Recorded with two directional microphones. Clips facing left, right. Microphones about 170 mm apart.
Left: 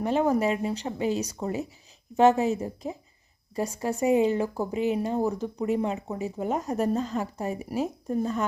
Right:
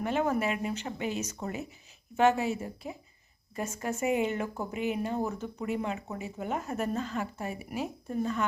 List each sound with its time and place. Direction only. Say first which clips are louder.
0.0 s a woman's voice: left 5 dB; 35° left (ahead or behind)